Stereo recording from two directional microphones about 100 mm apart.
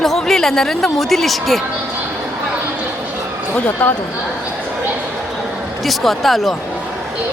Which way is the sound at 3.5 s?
15° left (ahead or behind).